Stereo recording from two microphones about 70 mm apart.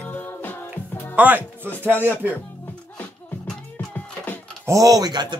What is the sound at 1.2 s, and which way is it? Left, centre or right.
Speech, right.